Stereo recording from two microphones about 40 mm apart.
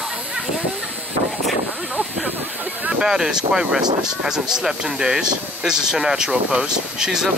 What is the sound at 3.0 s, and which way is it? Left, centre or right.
Speech, centre.